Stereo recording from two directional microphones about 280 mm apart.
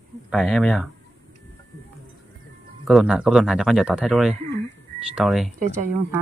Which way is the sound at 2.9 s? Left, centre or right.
Centre.